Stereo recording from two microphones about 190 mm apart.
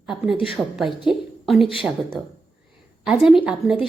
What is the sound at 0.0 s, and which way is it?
Speech, centre (ahead or behind).